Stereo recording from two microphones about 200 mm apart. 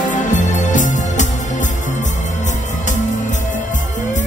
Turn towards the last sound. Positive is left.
turn(degrees=40)  # may be behind; listen again after turning